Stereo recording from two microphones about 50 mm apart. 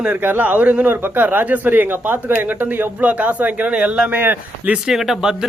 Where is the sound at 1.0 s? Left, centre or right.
Right.